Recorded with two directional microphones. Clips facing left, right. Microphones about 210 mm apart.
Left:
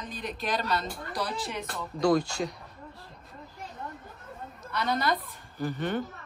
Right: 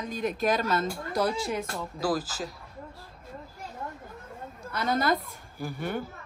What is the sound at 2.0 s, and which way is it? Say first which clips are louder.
Speech: left 5 dB; 5° right (ahead or behind).